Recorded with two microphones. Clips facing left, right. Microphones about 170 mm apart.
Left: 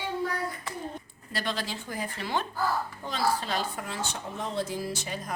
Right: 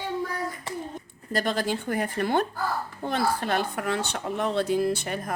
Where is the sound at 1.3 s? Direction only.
45° right (ahead or behind).